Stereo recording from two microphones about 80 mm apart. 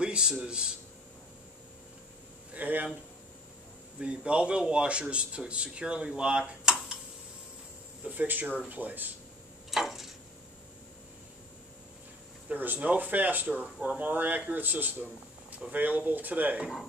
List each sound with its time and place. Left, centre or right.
0.0 s speech: centre
2.5 s speech: right
4.0 s speech: centre
8.0 s speech: right
9.7 s a sound: centre
12.4 s speech: right